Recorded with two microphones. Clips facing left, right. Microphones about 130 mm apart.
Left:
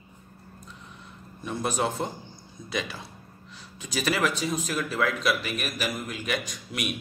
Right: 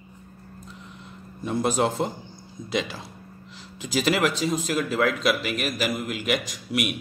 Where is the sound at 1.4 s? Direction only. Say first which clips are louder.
Right 5 dB; 25° right (ahead or behind).